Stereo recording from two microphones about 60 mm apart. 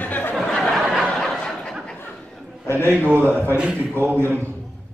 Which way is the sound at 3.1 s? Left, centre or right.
Right.